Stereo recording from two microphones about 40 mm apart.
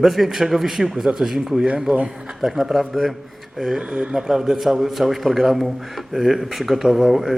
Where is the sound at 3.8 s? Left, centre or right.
Right.